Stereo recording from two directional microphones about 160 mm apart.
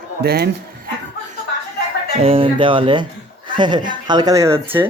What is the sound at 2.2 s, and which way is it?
Speech, 35° right (ahead or behind).